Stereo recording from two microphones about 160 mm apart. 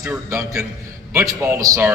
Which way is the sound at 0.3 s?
20° right (ahead or behind).